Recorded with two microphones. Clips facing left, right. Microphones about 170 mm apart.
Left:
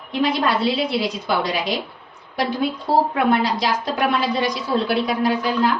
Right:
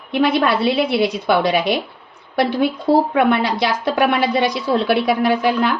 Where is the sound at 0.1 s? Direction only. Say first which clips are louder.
Right 4 dB; 65° right (ahead or behind).